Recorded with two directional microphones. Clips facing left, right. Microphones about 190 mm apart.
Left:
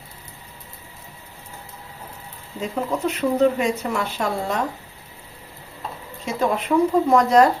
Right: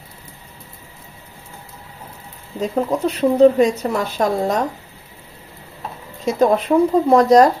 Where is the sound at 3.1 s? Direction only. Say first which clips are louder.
Right 7 dB; 35° right (ahead or behind).